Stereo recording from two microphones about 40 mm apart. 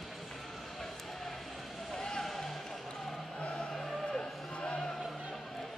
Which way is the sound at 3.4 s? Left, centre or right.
Left.